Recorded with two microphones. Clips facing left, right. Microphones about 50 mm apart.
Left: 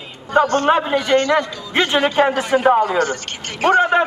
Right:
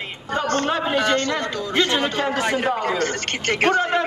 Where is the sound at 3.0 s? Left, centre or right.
Right.